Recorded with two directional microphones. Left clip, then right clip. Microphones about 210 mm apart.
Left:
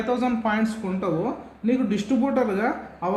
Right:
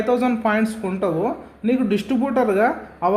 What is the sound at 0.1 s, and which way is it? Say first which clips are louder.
Speech: right 4 dB; 30° right (ahead or behind).